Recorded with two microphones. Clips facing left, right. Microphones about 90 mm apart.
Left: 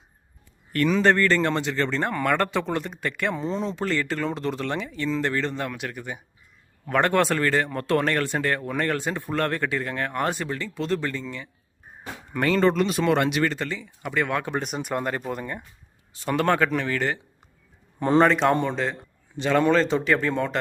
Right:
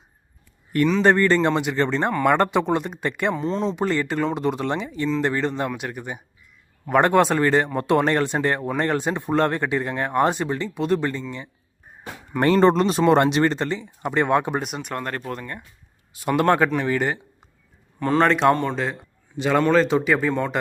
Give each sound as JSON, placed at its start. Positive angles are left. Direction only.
{"t": 1.0, "sound": "speech", "side_deg": -15}
{"t": 3.3, "sound": "speech", "side_deg": 0}
{"t": 3.8, "sound": "speech", "side_deg": -20}
{"t": 12.5, "sound": "speech", "side_deg": -30}
{"t": 14.6, "sound": "speech", "side_deg": 0}
{"t": 16.1, "sound": "speech", "side_deg": -10}
{"t": 18.2, "sound": "speech", "side_deg": 0}